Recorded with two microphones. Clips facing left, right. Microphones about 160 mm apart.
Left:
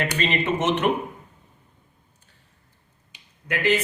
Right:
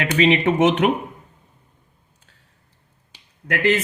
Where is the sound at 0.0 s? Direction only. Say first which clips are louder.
Right 7 dB; 75° right (ahead or behind).